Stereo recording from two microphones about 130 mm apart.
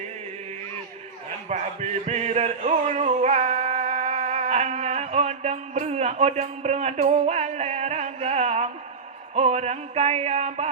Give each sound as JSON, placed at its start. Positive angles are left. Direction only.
{"t": 1.5, "sound": "music", "side_deg": -60}